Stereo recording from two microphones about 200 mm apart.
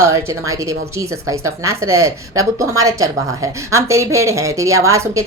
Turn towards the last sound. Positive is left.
turn(degrees=-15)  # may be behind; listen again after turning